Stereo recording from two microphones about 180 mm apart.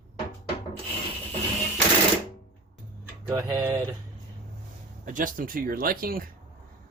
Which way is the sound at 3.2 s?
20° right (ahead or behind).